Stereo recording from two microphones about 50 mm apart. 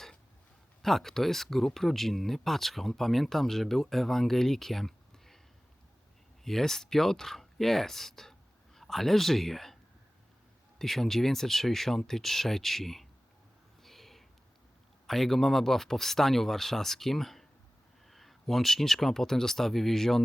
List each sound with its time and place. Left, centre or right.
0.8 s speech: centre
6.4 s speech: centre
10.8 s speech: centre
13.8 s a sound: centre
15.0 s speech: centre